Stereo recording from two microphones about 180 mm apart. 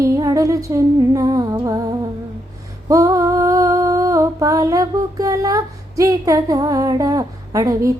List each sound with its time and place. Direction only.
0.0 s music: 20° right (ahead or behind)
2.9 s humming: 15° right (ahead or behind)